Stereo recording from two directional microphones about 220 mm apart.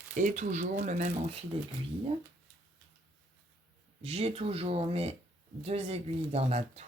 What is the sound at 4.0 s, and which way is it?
Speech, 25° right (ahead or behind).